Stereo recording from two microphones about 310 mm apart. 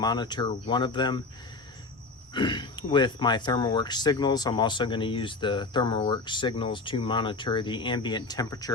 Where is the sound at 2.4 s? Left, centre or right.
Centre.